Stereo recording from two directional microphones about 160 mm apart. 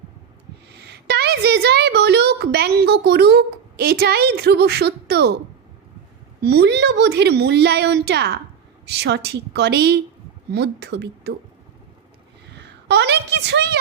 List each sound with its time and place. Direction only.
0.7 s a woman's voice: 90° right
6.4 s a woman's voice: 90° right
12.5 s a woman's voice: 90° right